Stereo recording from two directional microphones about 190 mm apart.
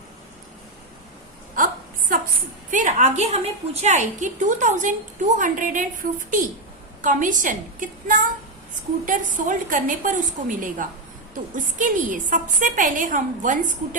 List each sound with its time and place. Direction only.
1.5 s whimper: 45° right (ahead or behind)
2.6 s a woman's voice: 40° right (ahead or behind)